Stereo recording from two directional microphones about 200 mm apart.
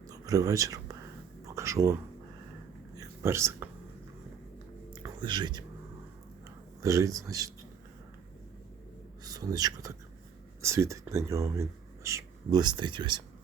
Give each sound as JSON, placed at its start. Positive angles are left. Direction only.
{"t": 0.1, "sound": "speech", "side_deg": -15}
{"t": 1.5, "sound": "a sound", "side_deg": -15}
{"t": 3.0, "sound": "a sound", "side_deg": -15}
{"t": 5.0, "sound": "speech", "side_deg": -20}
{"t": 6.8, "sound": "speech", "side_deg": -15}
{"t": 9.2, "sound": "speech", "side_deg": -20}